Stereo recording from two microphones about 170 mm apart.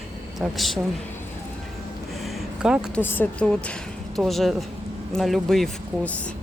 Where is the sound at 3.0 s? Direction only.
10° left (ahead or behind).